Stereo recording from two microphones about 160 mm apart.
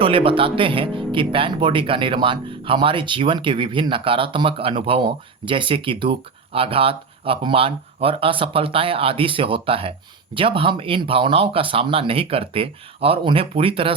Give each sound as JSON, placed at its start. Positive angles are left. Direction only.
{"t": 0.0, "sound": "speech", "side_deg": -35}